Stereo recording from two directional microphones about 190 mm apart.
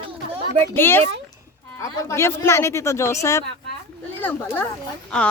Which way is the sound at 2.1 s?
15° left (ahead or behind).